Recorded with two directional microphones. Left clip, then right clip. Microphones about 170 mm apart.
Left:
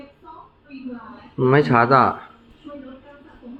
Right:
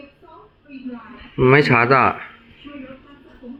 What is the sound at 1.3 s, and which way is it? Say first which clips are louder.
Speech: right 2 dB; 20° right (ahead or behind).